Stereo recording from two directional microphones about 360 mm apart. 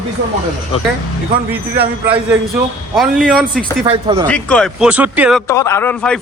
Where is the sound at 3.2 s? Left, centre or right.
Centre.